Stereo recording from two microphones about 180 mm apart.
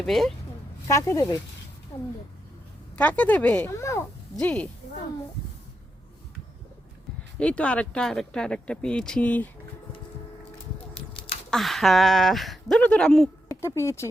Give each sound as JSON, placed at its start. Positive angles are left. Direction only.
{"t": 0.0, "sound": "speech", "side_deg": 0}
{"t": 0.9, "sound": "speech", "side_deg": 15}
{"t": 2.9, "sound": "speech", "side_deg": 10}
{"t": 7.3, "sound": "speech", "side_deg": 5}
{"t": 11.5, "sound": "speech", "side_deg": 0}
{"t": 13.5, "sound": "speech", "side_deg": 15}